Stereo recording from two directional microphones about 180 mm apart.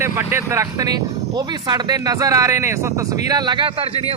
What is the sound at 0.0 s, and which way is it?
Speech, 15° right (ahead or behind).